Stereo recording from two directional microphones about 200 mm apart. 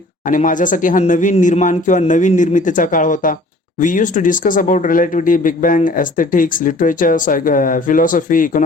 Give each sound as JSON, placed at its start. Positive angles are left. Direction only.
{"t": 0.3, "sound": "speech", "side_deg": 40}